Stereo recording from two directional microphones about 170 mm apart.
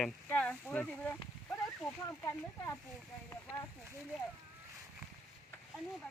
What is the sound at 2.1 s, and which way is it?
Speech, 20° left (ahead or behind).